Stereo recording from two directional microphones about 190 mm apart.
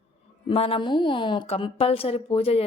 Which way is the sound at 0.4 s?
30° left (ahead or behind).